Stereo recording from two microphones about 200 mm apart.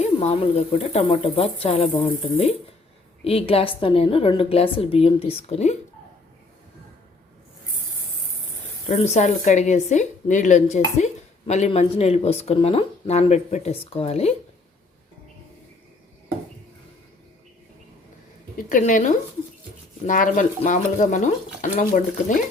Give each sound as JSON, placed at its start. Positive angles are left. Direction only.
{"t": 0.0, "sound": "a woman's voice", "side_deg": 30}
{"t": 8.9, "sound": "speech", "side_deg": 35}
{"t": 18.5, "sound": "a woman's voice", "side_deg": 40}